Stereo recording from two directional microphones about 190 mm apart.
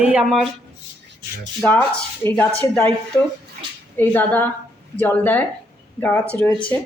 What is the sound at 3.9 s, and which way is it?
A woman's voice, 10° left (ahead or behind).